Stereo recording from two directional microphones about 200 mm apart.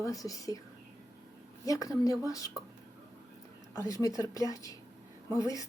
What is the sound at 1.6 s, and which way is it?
Speech, 15° left (ahead or behind).